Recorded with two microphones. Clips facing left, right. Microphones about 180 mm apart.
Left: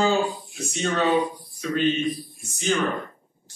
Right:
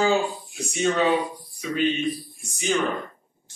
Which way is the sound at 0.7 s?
10° right (ahead or behind).